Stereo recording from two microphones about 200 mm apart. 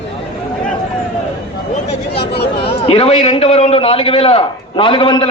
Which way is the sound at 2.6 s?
30° left (ahead or behind).